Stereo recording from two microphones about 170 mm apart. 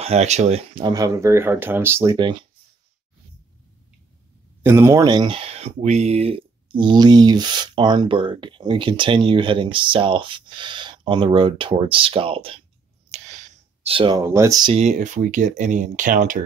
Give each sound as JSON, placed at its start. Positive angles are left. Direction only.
{"t": 0.0, "sound": "speech", "side_deg": -40}
{"t": 4.6, "sound": "speech", "side_deg": -15}
{"t": 13.1, "sound": "a sound", "side_deg": -40}
{"t": 14.2, "sound": "speech", "side_deg": -15}
{"t": 14.7, "sound": "speech", "side_deg": -40}